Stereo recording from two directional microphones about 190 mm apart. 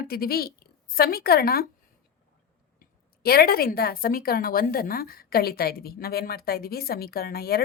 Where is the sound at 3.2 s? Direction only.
55° left (ahead or behind).